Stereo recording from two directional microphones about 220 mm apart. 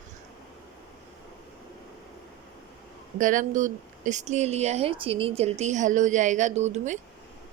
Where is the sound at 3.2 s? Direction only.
35° right (ahead or behind).